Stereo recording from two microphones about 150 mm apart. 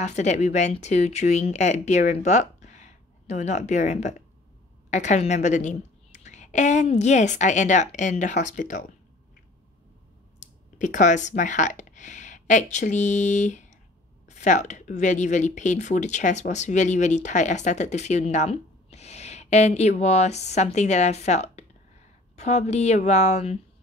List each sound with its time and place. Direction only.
0.0 s speech: 50° left (ahead or behind)
10.4 s speech: 55° left (ahead or behind)